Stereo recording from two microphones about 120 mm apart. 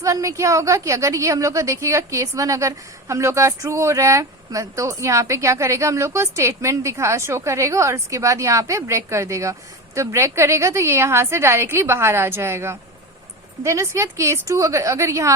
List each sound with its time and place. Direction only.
0.0 s a woman's voice: 25° right (ahead or behind)